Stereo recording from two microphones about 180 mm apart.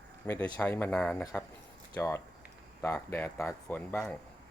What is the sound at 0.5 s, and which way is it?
Speech, 10° left (ahead or behind).